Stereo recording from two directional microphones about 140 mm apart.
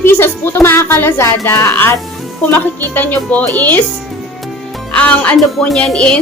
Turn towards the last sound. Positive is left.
turn(degrees=5)  # may be behind; listen again after turning